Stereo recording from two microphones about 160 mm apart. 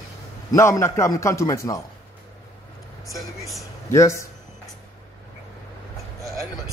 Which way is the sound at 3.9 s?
20° left (ahead or behind).